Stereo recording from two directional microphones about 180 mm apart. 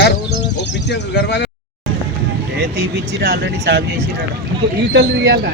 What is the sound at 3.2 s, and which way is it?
Speech, 70° right (ahead or behind).